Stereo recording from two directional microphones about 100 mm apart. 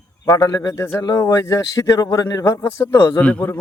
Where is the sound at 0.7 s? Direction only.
30° left (ahead or behind).